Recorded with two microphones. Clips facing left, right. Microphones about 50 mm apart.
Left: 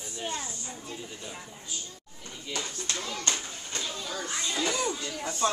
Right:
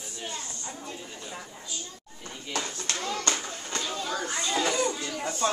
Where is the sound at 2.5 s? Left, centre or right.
Right.